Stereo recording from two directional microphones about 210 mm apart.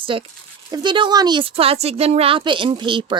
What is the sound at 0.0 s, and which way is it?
A woman's voice, 25° right (ahead or behind).